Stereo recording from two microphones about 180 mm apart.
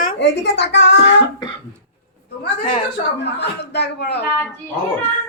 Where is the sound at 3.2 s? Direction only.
70° left (ahead or behind).